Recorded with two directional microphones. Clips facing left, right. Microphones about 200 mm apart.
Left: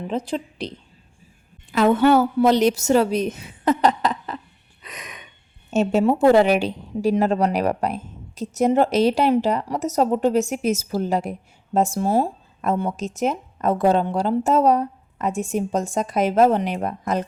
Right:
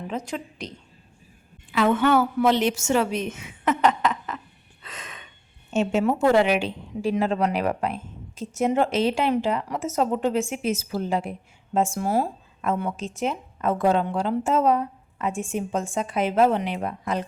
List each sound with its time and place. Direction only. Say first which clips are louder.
0.1 s a woman's voice: left 6 dB; 30° left (ahead or behind)
1.7 s a woman's voice: left 4 dB; 40° left (ahead or behind)
4.8 s gasp: left 2 dB; 15° left (ahead or behind)
5.7 s a woman's voice: left 4 dB; 40° left (ahead or behind)
12.0 s a woman's voice: left 4 dB; 25° left (ahead or behind); by 17.2 s 45° left (ahead or behind)